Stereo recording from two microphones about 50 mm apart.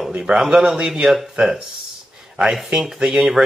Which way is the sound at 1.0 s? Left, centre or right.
Centre.